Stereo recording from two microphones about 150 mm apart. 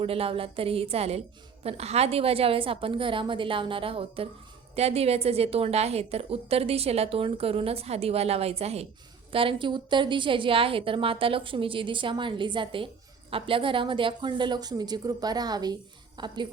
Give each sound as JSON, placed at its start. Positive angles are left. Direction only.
{"t": 0.0, "sound": "a woman's voice", "side_deg": -40}